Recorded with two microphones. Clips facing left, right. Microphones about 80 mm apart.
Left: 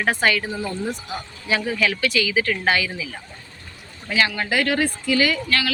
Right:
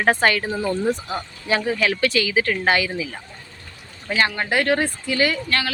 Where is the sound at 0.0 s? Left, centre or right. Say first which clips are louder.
Right 2 dB; right.